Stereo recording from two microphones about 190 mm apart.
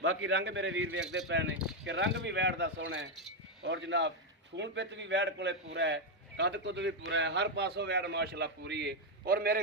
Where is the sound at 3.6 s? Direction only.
70° right (ahead or behind); by 9.6 s 50° right (ahead or behind).